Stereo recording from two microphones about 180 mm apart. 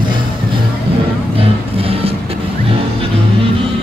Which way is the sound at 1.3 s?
30° right (ahead or behind).